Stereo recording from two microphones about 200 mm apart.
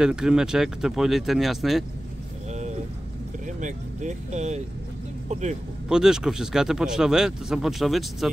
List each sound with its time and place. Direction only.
0.0 s speech: 5° right (ahead or behind)
3.4 s vehicle: 40° right (ahead or behind)
5.3 s speech: 35° right (ahead or behind)
5.9 s speech: 5° right (ahead or behind)